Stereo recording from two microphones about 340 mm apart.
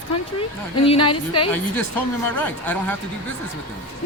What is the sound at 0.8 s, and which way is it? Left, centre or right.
Speech, centre.